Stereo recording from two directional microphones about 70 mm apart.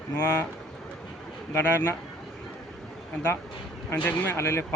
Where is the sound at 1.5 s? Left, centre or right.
Left.